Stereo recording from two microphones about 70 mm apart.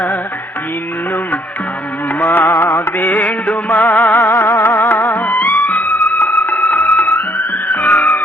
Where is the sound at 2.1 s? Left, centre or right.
Left.